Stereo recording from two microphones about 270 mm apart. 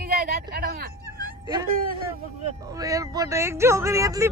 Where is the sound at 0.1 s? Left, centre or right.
Right.